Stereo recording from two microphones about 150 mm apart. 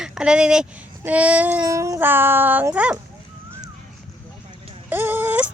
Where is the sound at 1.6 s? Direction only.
20° right (ahead or behind).